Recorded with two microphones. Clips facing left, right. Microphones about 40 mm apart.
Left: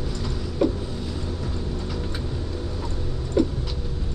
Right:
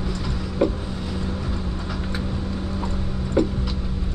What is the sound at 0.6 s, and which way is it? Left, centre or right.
Vehicle, centre.